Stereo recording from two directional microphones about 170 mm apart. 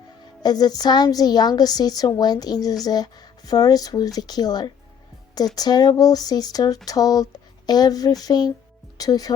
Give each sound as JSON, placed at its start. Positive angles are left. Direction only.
{"t": 0.4, "sound": "a woman's voice", "side_deg": 25}